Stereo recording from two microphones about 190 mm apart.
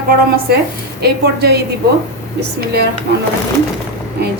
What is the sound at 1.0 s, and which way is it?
Speech, 60° right (ahead or behind).